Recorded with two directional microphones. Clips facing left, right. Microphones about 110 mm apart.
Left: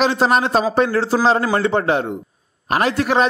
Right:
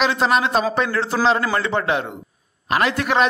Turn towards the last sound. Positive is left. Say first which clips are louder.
# left 2 dB
turn(degrees=35)  # may be behind; listen again after turning